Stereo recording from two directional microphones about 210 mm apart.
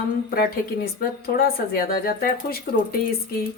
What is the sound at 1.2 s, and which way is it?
A woman's voice, 45° left (ahead or behind).